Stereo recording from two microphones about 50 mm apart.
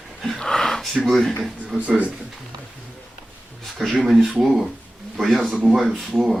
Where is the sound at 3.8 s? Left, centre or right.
Centre.